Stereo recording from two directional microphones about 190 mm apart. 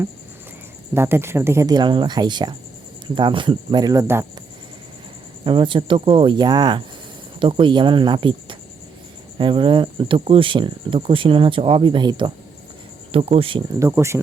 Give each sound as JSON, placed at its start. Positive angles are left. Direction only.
{"t": 0.9, "sound": "speech", "side_deg": -10}
{"t": 5.5, "sound": "speech", "side_deg": -25}
{"t": 13.7, "sound": "speech", "side_deg": -15}